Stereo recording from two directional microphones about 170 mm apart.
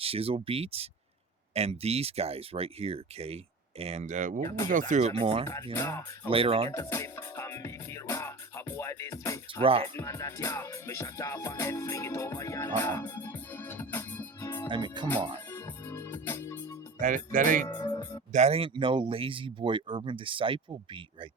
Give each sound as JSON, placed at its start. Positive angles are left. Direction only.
{"t": 0.0, "sound": "speech", "side_deg": -35}
{"t": 5.7, "sound": "music", "side_deg": 15}
{"t": 6.3, "sound": "speech", "side_deg": -35}
{"t": 6.7, "sound": "music", "side_deg": 15}
{"t": 9.6, "sound": "speech", "side_deg": -35}
{"t": 10.0, "sound": "music", "side_deg": 15}
{"t": 14.7, "sound": "speech", "side_deg": -25}
{"t": 15.4, "sound": "music", "side_deg": 10}
{"t": 17.0, "sound": "speech", "side_deg": -50}
{"t": 17.7, "sound": "speech", "side_deg": 25}
{"t": 18.3, "sound": "speech", "side_deg": -40}